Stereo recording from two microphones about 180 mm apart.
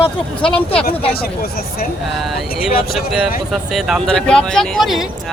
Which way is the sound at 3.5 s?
Centre (ahead or behind).